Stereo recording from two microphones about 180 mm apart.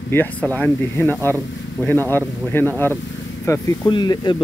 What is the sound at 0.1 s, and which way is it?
Speech, 10° left (ahead or behind).